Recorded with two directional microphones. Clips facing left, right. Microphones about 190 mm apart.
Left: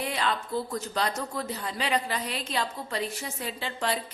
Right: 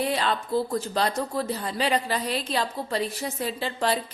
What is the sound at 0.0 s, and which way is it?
Speech, 35° right (ahead or behind).